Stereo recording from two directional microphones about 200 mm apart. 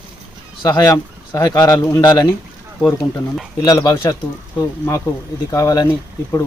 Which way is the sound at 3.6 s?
20° left (ahead or behind).